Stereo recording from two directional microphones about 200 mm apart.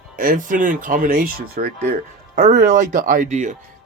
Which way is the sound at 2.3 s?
35° right (ahead or behind).